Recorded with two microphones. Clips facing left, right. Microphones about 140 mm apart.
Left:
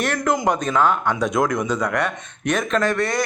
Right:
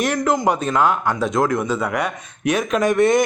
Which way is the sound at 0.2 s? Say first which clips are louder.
Right 2 dB; 5° right (ahead or behind).